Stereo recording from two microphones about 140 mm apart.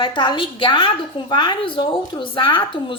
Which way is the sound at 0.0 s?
35° left (ahead or behind).